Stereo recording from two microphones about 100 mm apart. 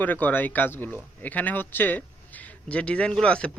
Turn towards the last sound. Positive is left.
turn(degrees=10)  # may be behind; listen again after turning